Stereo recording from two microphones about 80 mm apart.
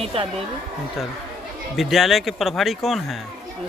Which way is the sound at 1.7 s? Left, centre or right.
Centre.